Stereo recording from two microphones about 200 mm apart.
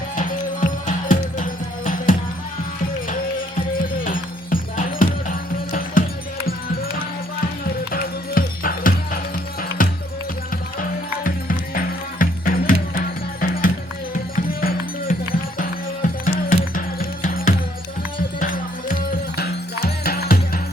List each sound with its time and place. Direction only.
0.2 s music: 40° left (ahead or behind)
4.0 s music: 45° left (ahead or behind)
7.9 s music: 45° left (ahead or behind)